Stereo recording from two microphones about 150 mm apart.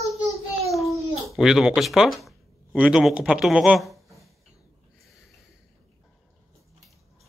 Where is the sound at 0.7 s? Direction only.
Centre (ahead or behind).